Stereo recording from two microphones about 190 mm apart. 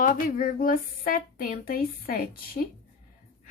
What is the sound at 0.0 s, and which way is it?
Speech, 45° left (ahead or behind).